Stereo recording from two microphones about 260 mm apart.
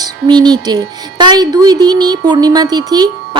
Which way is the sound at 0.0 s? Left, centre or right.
Centre.